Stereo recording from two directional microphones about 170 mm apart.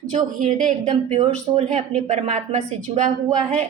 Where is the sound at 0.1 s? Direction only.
50° right (ahead or behind).